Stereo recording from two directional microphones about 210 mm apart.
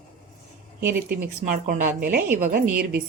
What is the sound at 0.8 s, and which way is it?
A woman's voice, 50° right (ahead or behind).